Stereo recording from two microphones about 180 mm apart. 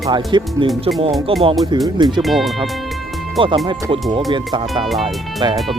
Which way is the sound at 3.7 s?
25° right (ahead or behind).